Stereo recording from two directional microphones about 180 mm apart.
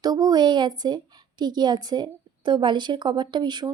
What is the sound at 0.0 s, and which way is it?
A woman's voice, 20° right (ahead or behind).